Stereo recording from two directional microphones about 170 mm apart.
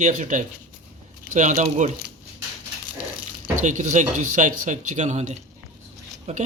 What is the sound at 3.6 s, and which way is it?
A man's voice, 45° right (ahead or behind).